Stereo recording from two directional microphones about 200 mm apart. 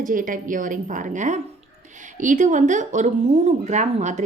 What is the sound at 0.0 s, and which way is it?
A woman's voice, 40° right (ahead or behind).